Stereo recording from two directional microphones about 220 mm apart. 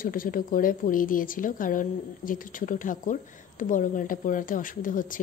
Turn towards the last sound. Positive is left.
turn(degrees=35)  # may be behind; listen again after turning